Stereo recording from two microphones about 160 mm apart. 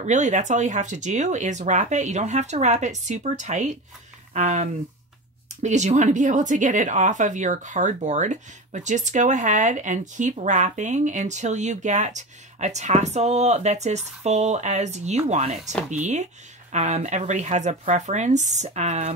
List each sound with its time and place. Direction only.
0.0 s speech: 50° right (ahead or behind)